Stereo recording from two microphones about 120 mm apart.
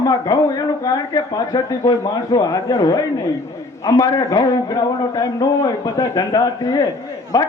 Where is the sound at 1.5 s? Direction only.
40° left (ahead or behind).